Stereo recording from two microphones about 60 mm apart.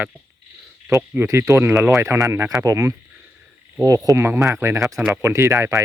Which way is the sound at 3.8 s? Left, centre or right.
Right.